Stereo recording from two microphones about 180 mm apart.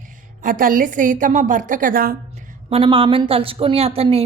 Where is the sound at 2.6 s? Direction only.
30° right (ahead or behind).